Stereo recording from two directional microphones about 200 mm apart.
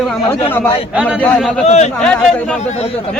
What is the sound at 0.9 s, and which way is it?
Speech, 5° right (ahead or behind).